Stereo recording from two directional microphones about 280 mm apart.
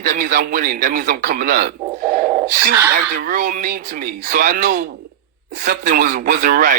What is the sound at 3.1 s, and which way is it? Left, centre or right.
Speech, right.